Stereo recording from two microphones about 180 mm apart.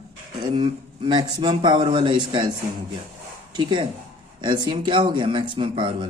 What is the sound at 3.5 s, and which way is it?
Speech, 25° right (ahead or behind).